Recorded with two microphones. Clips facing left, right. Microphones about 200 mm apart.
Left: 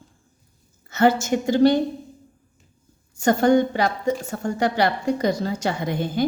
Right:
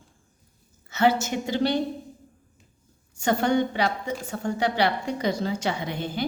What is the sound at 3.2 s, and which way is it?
A woman's voice, 45° left (ahead or behind).